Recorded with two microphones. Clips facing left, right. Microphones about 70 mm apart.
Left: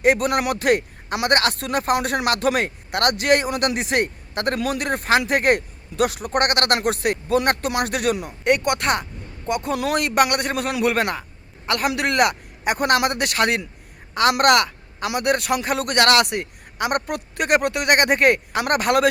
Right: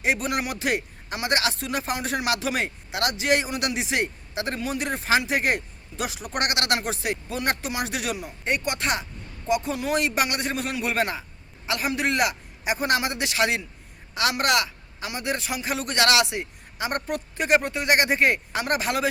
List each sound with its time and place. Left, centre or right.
0.0 s a woman's voice: left